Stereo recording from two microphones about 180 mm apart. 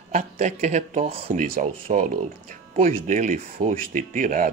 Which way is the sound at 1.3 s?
50° right (ahead or behind).